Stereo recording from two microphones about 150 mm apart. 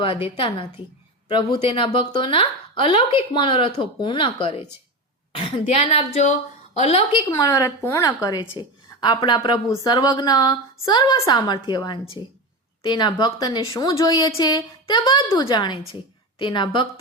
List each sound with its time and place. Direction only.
0.0 s a woman's voice: 35° left (ahead or behind)
7.3 s a woman's voice: 20° left (ahead or behind)